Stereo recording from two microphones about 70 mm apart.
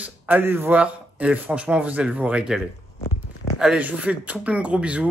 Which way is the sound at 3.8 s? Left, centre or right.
Right.